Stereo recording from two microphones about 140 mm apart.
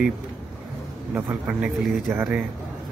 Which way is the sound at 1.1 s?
15° right (ahead or behind).